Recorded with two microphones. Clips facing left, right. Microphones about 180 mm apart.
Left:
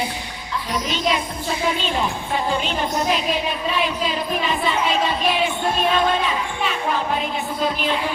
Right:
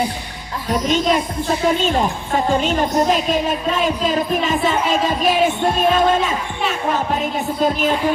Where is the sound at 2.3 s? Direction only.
45° right (ahead or behind).